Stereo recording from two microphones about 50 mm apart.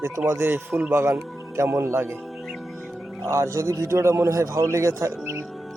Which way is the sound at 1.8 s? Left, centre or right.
Right.